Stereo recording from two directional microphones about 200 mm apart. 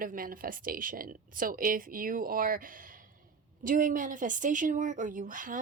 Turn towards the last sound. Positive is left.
turn(degrees=-40)  # may be behind; listen again after turning